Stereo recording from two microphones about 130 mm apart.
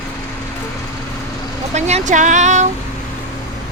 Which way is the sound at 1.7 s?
60° right (ahead or behind).